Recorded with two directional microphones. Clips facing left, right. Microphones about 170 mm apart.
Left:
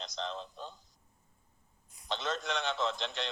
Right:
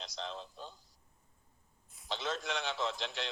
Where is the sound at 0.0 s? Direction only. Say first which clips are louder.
Left 3 dB; 5° right (ahead or behind).